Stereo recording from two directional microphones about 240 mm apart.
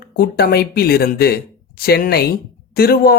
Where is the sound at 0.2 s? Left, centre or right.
Left.